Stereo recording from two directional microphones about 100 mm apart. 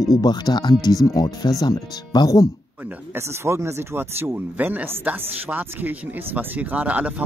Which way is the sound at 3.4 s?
25° right (ahead or behind).